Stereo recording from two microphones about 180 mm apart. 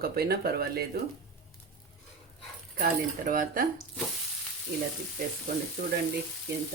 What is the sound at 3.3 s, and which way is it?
Speech, 50° right (ahead or behind).